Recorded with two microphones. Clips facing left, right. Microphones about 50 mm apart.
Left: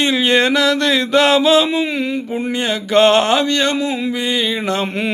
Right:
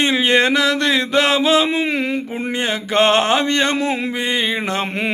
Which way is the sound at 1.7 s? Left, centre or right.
Right.